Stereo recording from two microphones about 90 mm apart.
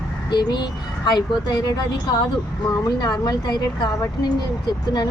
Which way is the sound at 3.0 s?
50° left (ahead or behind).